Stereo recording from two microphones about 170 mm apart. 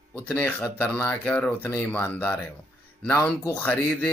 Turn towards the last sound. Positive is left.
turn(degrees=10)  # may be behind; listen again after turning